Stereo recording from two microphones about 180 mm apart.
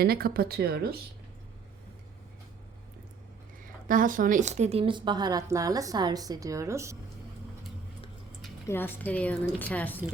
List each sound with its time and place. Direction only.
0.0 s speech: 60° right (ahead or behind)
3.6 s a woman's voice: 50° right (ahead or behind); by 6.9 s 15° right (ahead or behind)
8.6 s speech: 10° left (ahead or behind)